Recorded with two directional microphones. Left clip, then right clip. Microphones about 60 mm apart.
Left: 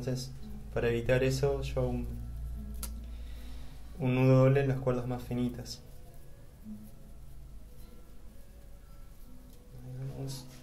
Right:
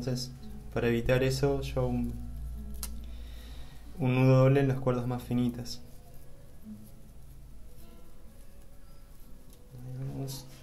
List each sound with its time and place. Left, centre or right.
0.0 s speech: right
4.0 s speech: right